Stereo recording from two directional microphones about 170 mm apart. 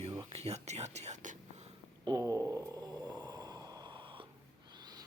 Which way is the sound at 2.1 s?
20° right (ahead or behind).